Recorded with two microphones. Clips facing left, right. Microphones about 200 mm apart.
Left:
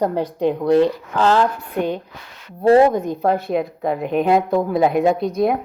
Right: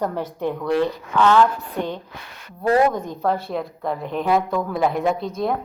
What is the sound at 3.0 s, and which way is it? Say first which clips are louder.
A woman's voice: left 4 dB; 15° left (ahead or behind).